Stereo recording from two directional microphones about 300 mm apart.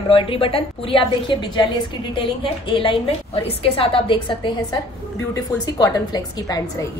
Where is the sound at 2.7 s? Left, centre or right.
Centre.